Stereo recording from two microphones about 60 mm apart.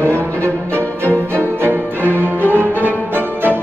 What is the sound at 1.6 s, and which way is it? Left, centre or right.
Music, right.